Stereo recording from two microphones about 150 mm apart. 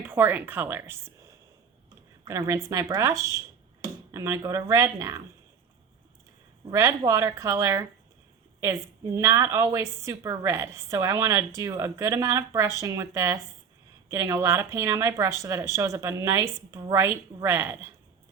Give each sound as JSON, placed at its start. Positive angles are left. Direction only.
{"t": 0.0, "sound": "speech", "side_deg": -10}
{"t": 2.2, "sound": "a woman's voice", "side_deg": -20}
{"t": 6.7, "sound": "a woman's voice", "side_deg": -20}
{"t": 9.1, "sound": "a woman's voice", "side_deg": -20}